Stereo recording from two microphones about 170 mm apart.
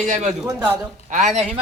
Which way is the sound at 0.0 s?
45° right (ahead or behind).